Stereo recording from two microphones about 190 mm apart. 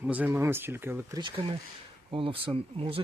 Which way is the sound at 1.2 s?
25° right (ahead or behind).